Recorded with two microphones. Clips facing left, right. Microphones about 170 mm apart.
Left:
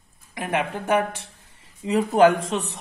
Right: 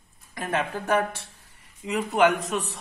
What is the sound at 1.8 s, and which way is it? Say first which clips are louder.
Speech: left 5 dB; 35° left (ahead or behind).